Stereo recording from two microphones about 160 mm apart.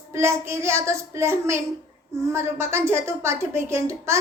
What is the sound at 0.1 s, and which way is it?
A woman's voice, 15° right (ahead or behind).